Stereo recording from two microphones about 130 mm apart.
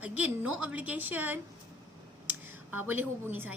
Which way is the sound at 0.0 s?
10° right (ahead or behind).